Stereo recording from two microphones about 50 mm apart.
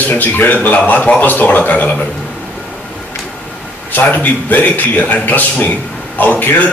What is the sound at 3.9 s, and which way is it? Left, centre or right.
A man's voice, left.